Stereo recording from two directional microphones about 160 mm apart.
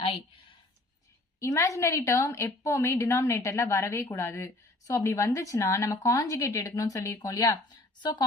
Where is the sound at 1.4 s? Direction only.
20° left (ahead or behind).